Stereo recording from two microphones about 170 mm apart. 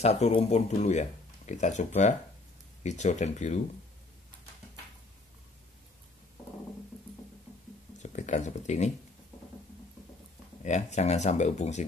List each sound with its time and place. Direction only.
0.0 s speech: 40° left (ahead or behind)
8.0 s speech: 45° left (ahead or behind)
10.6 s speech: 45° left (ahead or behind)